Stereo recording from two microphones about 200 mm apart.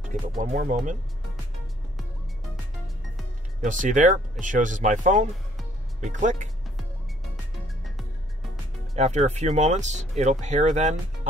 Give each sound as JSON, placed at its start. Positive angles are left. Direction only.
{"t": 0.4, "sound": "speech", "side_deg": -40}
{"t": 3.6, "sound": "speech", "side_deg": -40}
{"t": 8.9, "sound": "speech", "side_deg": -35}